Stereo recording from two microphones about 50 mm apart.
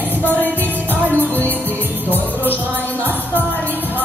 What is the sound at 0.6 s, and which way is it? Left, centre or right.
Music, right.